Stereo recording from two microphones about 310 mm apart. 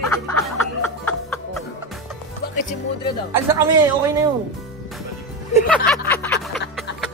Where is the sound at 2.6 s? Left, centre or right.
Left.